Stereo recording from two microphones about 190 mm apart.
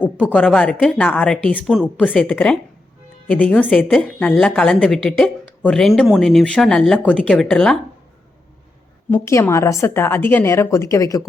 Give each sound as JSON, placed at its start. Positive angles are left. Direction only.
{"t": 0.3, "sound": "a woman's voice", "side_deg": 5}
{"t": 9.0, "sound": "a woman's voice", "side_deg": 15}